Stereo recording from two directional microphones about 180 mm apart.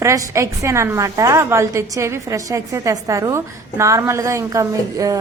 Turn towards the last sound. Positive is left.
turn(degrees=-20)  # may be behind; listen again after turning